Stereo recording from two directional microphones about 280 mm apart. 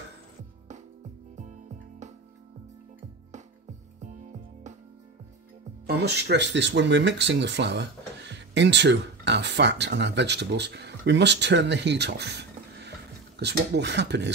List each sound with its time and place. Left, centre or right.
1.3 s music: right
4.0 s music: right
5.9 s speech: right